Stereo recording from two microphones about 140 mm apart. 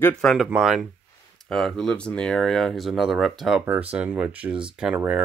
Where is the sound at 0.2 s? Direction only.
Centre (ahead or behind).